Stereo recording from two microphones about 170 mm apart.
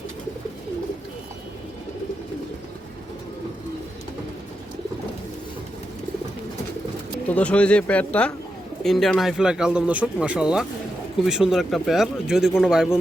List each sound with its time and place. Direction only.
7.3 s speech: 5° left (ahead or behind)